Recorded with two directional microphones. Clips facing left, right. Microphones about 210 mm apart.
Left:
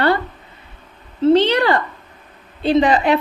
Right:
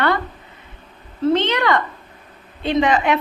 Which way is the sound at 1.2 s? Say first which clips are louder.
Left 4 dB; 35° left (ahead or behind).